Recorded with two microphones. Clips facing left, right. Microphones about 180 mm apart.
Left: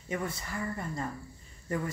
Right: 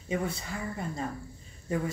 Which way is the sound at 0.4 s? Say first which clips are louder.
Even; 15° right (ahead or behind).